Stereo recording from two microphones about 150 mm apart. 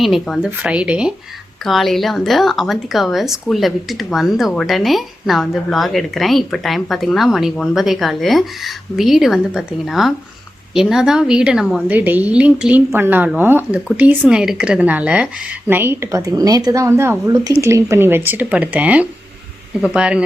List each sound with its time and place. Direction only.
0.0 s a woman's voice: centre (ahead or behind)